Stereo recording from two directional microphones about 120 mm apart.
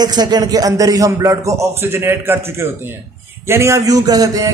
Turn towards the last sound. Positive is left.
turn(degrees=-30)  # may be behind; listen again after turning